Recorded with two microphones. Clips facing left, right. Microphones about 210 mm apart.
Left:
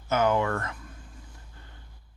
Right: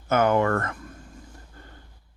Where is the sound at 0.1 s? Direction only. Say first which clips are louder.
Right 4 dB; 55° right (ahead or behind).